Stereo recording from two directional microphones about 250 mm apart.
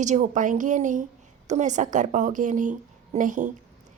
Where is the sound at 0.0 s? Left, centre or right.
Right.